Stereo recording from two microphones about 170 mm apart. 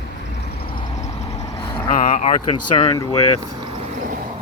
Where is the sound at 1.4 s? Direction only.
25° left (ahead or behind).